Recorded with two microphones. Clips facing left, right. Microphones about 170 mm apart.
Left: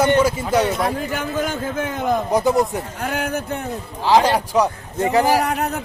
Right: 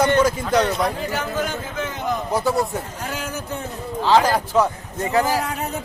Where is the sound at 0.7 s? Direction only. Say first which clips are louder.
Left 1 dB; 50° left (ahead or behind).